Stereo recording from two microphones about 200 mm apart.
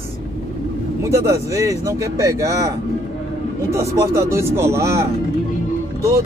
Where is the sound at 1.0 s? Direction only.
15° right (ahead or behind).